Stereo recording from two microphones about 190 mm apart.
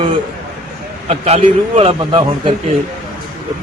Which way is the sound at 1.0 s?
35° right (ahead or behind).